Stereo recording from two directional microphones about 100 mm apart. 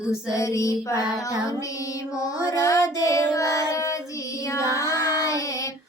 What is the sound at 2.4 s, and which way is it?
Child singing, 30° left (ahead or behind).